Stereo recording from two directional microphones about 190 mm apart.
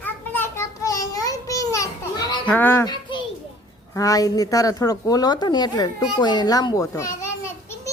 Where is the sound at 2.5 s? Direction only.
10° left (ahead or behind).